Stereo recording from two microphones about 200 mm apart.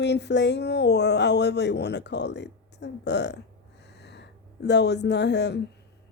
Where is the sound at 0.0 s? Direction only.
60° left (ahead or behind).